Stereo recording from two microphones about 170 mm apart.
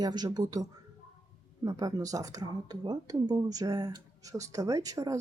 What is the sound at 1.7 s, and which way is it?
Speech, 20° right (ahead or behind).